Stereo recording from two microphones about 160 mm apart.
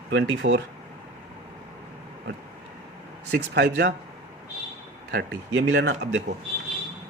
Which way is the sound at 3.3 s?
80° right.